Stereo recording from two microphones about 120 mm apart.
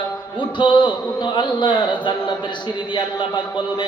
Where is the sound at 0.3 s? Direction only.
40° left (ahead or behind).